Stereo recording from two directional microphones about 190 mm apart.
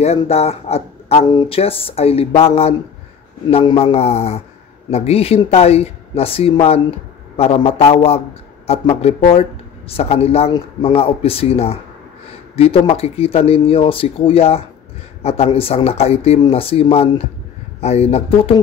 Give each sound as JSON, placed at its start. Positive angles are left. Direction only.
{"t": 0.0, "sound": "speech", "side_deg": 35}
{"t": 1.2, "sound": "speech", "side_deg": 20}